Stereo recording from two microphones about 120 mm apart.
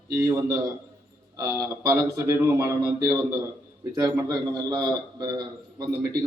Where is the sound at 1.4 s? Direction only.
30° right (ahead or behind).